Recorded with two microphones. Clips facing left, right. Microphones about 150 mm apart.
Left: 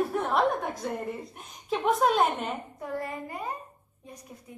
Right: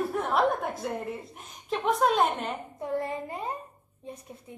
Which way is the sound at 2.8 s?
25° right (ahead or behind).